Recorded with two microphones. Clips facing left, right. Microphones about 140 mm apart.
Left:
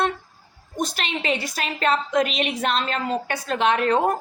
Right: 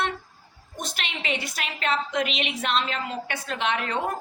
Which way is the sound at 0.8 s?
40° left (ahead or behind).